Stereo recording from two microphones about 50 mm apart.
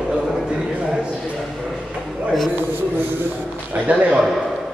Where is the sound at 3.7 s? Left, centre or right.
Right.